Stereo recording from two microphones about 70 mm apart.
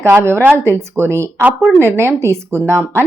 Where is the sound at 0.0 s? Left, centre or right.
Right.